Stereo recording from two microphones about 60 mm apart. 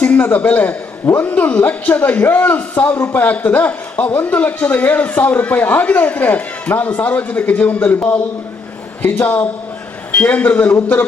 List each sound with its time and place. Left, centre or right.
0.0 s a man's voice: left
9.0 s a man's voice: left